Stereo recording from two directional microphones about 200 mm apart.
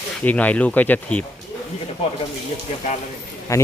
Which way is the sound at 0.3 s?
5° left (ahead or behind).